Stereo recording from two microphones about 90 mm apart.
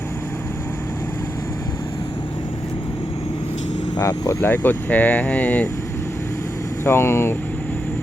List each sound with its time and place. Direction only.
3.9 s speech: 40° left (ahead or behind); by 5.6 s 15° left (ahead or behind)
6.8 s speech: 30° left (ahead or behind)